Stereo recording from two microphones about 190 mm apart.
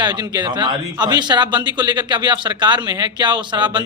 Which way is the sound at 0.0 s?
20° right (ahead or behind).